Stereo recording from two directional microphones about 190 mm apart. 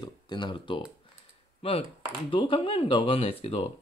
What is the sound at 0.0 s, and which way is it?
Speech, 25° left (ahead or behind).